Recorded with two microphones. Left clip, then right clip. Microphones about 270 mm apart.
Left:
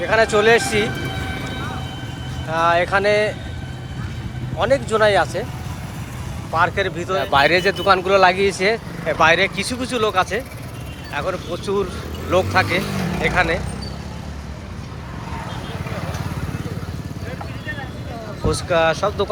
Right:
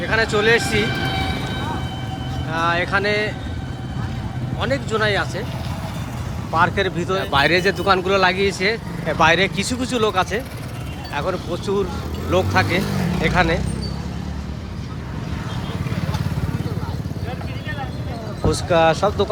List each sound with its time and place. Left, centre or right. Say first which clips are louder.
0.0 s speech: left 3 dB; centre
2.5 s speech: left 3 dB; centre
4.6 s speech: left 5 dB; centre
6.5 s speech: even; centre
13.0 s vehicle: even; centre
13.2 s speech: even; centre
18.4 s speech: right 1 dB; centre